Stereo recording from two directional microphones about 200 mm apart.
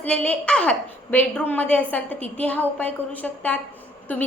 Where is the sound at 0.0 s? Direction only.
5° left (ahead or behind).